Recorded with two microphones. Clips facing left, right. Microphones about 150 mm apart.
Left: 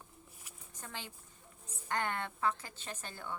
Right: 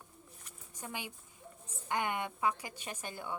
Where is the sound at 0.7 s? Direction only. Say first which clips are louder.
Right 4 dB; 15° right (ahead or behind).